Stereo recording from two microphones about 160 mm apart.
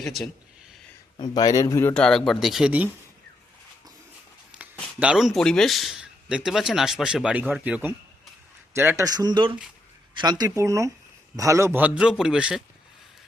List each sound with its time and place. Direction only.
0.0 s speech: centre (ahead or behind)
1.1 s speech: 25° left (ahead or behind); by 2.9 s 10° right (ahead or behind)
4.5 s a man's voice: 10° right (ahead or behind)